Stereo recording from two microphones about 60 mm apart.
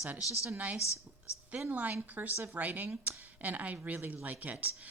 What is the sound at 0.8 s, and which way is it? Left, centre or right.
Speech, left.